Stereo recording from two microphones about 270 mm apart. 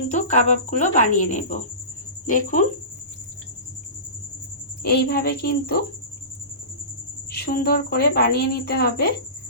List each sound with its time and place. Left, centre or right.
0.1 s speech: left
4.8 s a woman's voice: left
7.3 s a woman's voice: left